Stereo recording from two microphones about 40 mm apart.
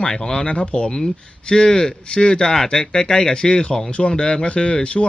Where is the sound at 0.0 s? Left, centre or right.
Left.